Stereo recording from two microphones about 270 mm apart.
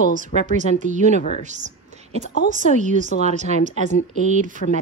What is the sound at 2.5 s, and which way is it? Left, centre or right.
A woman's voice, right.